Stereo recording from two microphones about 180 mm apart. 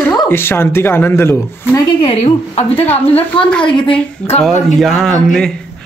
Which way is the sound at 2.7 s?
10° left (ahead or behind).